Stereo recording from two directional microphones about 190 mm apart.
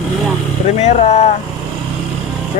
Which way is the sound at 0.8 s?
35° left (ahead or behind).